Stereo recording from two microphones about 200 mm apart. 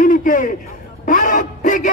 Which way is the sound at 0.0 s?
40° left (ahead or behind).